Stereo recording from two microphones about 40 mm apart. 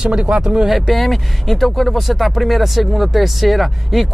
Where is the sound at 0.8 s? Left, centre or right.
Centre.